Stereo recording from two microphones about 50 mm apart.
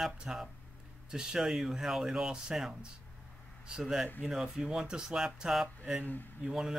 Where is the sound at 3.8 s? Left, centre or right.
Centre.